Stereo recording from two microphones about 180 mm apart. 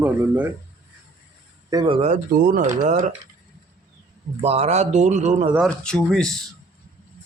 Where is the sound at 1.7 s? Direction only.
25° right (ahead or behind).